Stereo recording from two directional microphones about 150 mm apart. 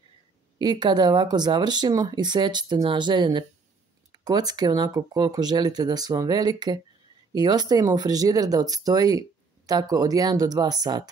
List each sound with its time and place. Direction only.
0.6 s speech: 30° right (ahead or behind)